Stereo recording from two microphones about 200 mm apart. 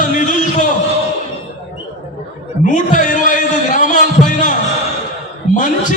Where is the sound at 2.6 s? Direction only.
40° left (ahead or behind).